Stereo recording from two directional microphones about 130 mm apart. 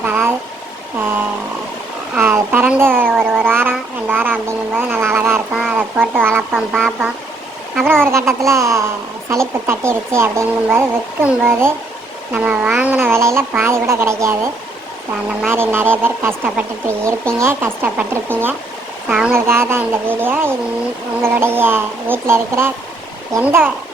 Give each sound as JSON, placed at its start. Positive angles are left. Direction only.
{"t": 0.0, "sound": "a sound", "side_deg": -15}
{"t": 2.1, "sound": "speech", "side_deg": -15}
{"t": 6.5, "sound": "a sound", "side_deg": 0}
{"t": 8.0, "sound": "speech", "side_deg": -20}
{"t": 19.0, "sound": "speech", "side_deg": -5}
{"t": 19.3, "sound": "speech", "side_deg": -20}